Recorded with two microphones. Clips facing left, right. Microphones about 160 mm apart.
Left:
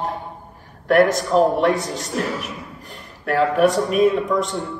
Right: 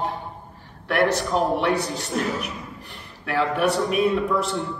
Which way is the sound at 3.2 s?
40° left (ahead or behind).